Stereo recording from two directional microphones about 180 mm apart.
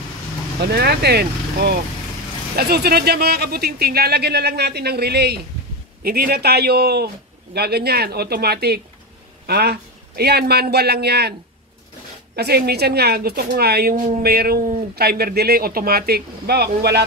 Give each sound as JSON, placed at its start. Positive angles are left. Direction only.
{"t": 0.6, "sound": "speech", "side_deg": -60}
{"t": 12.4, "sound": "speech", "side_deg": -60}
{"t": 14.3, "sound": "speech", "side_deg": -60}